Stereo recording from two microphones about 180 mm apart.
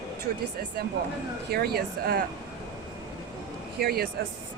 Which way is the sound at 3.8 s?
60° right (ahead or behind).